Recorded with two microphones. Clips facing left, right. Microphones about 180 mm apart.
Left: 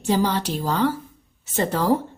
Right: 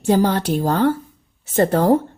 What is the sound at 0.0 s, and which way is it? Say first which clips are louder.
A woman's voice: right 5 dB; 50° right (ahead or behind).